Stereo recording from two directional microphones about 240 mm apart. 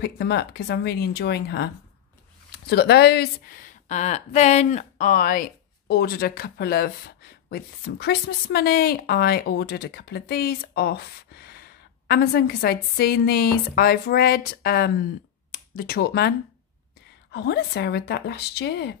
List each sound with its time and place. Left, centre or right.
0.0 s speech: left